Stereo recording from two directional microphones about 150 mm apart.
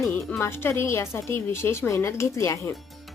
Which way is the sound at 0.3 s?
15° left (ahead or behind).